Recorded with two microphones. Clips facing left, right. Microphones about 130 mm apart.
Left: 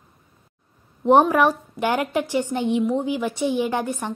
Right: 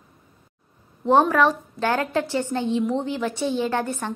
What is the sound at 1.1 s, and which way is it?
A woman's voice, 15° left (ahead or behind).